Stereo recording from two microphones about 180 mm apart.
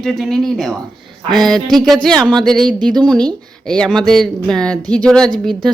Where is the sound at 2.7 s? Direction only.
25° right (ahead or behind).